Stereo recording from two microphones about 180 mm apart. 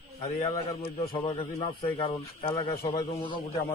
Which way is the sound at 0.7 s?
30° left (ahead or behind).